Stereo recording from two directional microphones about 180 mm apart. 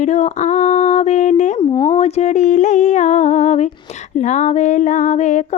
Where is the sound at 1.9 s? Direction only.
40° left (ahead or behind).